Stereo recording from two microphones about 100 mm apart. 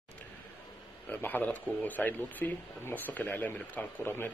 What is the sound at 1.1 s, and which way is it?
Speech, 20° left (ahead or behind).